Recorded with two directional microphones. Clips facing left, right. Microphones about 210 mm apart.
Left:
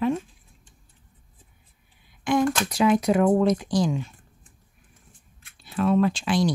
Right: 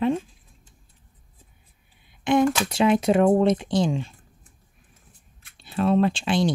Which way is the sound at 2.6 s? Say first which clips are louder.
Right 1 dB; 25° right (ahead or behind).